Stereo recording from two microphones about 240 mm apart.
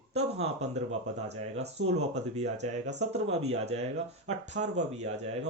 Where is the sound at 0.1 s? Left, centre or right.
Right.